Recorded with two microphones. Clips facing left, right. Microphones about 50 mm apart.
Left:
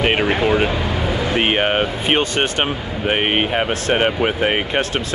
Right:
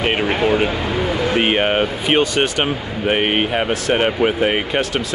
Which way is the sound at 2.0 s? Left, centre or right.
Left.